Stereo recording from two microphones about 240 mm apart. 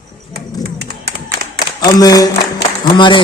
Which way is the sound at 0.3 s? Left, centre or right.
Right.